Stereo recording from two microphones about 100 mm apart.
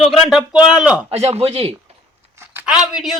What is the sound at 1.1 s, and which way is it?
Speech, 90° right.